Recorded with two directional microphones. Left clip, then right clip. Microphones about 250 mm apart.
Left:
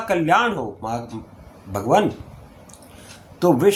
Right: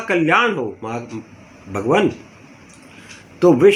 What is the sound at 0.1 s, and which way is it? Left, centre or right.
Speech, left.